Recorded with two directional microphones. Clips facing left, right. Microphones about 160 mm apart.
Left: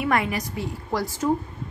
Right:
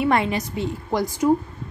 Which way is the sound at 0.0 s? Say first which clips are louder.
Right 3 dB; 25° right (ahead or behind).